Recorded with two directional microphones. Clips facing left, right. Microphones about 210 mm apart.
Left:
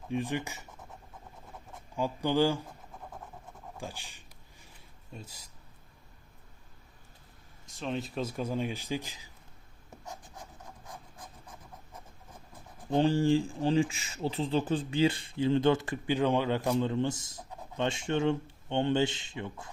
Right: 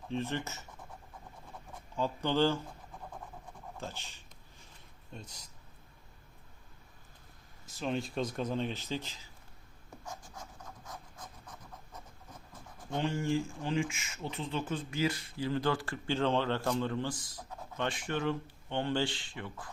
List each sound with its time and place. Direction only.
0.1 s speech: 15° left (ahead or behind)
2.0 s speech: 15° left (ahead or behind)
7.7 s speech: centre (ahead or behind)
10.1 s writing: 20° left (ahead or behind)
12.9 s speech: 30° left (ahead or behind)